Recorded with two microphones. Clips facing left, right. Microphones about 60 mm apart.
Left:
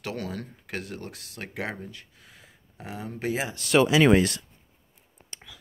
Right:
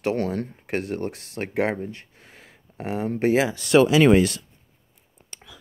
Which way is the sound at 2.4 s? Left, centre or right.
Right.